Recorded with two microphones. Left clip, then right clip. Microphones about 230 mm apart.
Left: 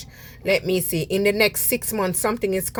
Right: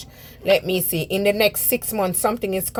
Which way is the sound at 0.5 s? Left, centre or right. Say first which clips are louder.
Right 2 dB; left.